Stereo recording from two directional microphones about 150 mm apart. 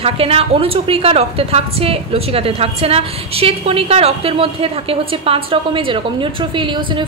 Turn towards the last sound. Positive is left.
turn(degrees=-30)  # may be behind; listen again after turning